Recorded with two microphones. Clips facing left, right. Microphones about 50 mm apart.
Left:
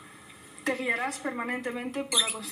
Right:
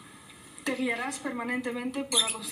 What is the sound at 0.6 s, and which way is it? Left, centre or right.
Speech, left.